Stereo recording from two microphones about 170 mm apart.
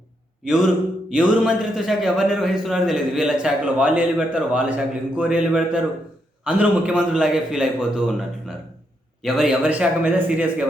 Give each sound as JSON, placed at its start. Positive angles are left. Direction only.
{"t": 0.4, "sound": "a man's voice", "side_deg": -5}